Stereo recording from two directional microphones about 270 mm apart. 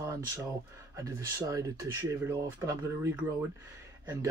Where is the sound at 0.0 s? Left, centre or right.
Centre.